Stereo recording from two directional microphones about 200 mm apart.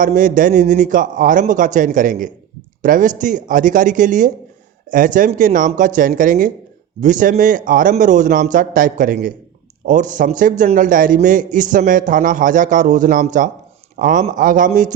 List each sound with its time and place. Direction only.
0.0 s a man's voice: 40° right (ahead or behind)